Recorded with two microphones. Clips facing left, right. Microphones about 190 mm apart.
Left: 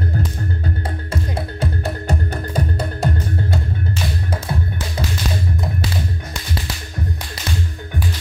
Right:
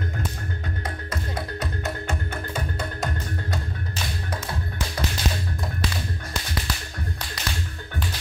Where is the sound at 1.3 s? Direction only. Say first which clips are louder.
Left 6 dB; 30° left (ahead or behind).